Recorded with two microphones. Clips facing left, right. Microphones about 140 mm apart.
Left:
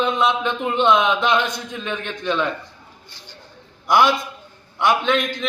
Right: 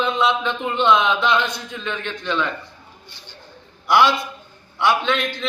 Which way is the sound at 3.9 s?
15° left (ahead or behind).